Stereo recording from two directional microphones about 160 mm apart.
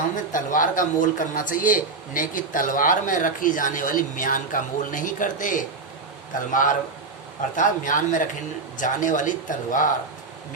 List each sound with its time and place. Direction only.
0.3 s a man's voice: 55° left (ahead or behind)